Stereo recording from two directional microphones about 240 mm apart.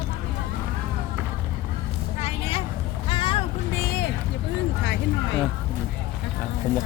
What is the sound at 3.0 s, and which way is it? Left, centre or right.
Boat, left.